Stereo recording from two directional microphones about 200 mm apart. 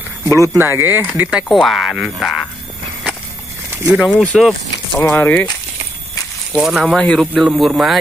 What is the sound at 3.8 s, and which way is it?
Speech, centre (ahead or behind).